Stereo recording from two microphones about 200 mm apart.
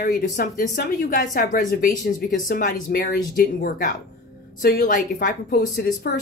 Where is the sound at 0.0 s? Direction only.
45° left (ahead or behind).